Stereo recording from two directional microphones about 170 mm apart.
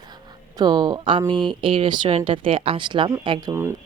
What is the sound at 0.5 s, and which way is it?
Speech, 25° right (ahead or behind).